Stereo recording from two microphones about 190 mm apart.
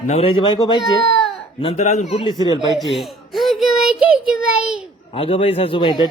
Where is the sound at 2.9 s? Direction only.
Centre (ahead or behind).